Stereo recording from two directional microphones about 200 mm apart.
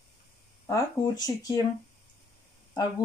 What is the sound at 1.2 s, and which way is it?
Speech, 20° left (ahead or behind).